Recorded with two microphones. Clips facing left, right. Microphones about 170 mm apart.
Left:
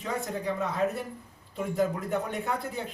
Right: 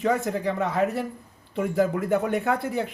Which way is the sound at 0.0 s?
75° right (ahead or behind).